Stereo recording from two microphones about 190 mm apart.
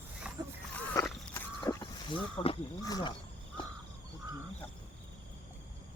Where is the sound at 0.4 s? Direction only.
20° right (ahead or behind).